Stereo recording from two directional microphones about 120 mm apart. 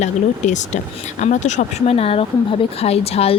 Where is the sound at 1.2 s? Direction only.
80° left.